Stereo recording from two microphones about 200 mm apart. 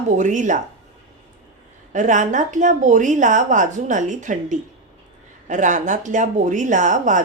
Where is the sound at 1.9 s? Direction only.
40° right (ahead or behind).